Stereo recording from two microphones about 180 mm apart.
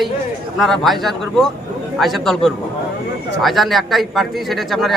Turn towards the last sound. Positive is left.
turn(degrees=0)  # may be behind; listen again after turning